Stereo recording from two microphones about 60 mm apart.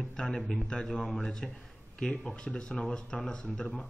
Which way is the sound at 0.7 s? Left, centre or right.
Centre.